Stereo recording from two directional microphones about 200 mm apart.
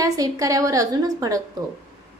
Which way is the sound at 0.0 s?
15° right (ahead or behind).